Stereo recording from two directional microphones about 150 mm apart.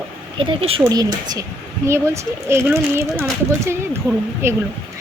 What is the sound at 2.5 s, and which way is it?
Speech, 15° right (ahead or behind).